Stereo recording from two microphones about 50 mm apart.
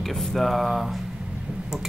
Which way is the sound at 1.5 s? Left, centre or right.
Centre.